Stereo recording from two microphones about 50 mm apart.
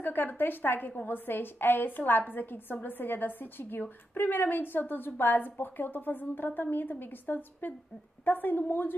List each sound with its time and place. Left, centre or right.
0.0 s a woman's voice: left